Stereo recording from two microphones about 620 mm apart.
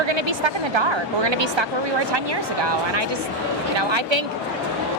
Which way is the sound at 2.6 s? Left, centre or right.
Right.